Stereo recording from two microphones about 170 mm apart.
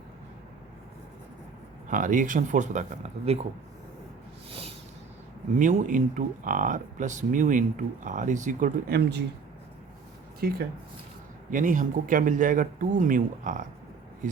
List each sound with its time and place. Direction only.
1.9 s a man's voice: 50° right (ahead or behind)
5.5 s a man's voice: 50° right (ahead or behind)
9.0 s speech: 90° right
10.4 s speech: 65° right (ahead or behind)
11.5 s a man's voice: 50° right (ahead or behind)